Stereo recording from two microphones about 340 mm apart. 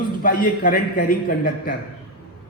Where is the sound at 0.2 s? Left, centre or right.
Left.